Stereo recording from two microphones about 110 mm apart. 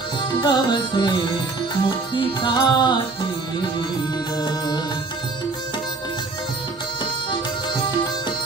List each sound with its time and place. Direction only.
0.4 s music: 45° left (ahead or behind)
7.7 s music: 40° left (ahead or behind)